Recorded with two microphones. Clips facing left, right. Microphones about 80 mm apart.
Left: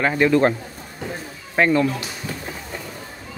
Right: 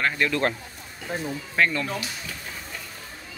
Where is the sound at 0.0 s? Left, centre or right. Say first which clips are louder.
Left 7 dB; centre.